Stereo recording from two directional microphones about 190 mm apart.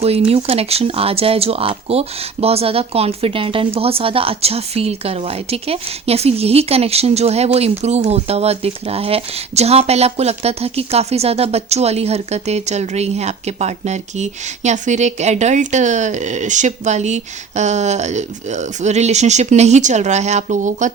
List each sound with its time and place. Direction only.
0.3 s speech: 30° right (ahead or behind)